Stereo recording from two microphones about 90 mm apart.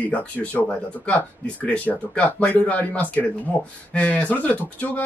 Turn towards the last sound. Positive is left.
turn(degrees=15)  # may be behind; listen again after turning